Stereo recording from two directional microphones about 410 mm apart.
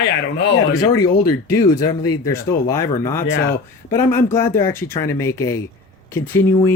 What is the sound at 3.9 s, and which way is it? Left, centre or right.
Speech, centre.